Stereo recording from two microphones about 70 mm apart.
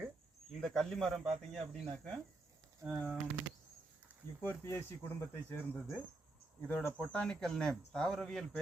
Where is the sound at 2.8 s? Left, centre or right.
Right.